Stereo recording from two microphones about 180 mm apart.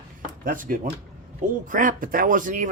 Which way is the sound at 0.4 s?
50° right (ahead or behind).